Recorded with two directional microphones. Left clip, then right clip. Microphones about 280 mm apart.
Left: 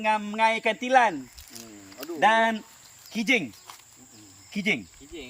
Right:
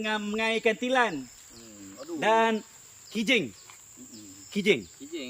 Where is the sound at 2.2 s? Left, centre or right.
Left.